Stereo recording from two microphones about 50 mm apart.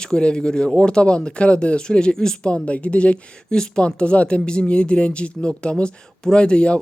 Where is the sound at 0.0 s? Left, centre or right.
Centre.